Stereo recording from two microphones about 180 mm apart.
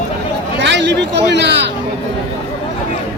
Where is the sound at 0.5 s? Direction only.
75° right (ahead or behind).